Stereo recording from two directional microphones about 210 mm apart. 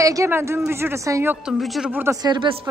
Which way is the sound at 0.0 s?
15° right (ahead or behind).